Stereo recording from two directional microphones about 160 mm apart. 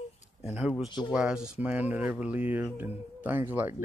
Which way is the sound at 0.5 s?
5° right (ahead or behind).